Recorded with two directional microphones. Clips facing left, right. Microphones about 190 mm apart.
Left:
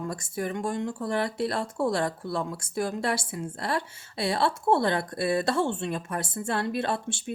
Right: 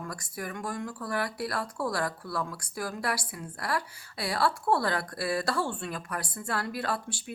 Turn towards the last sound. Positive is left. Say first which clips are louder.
# left 4 dB
turn(degrees=25)  # may be behind; listen again after turning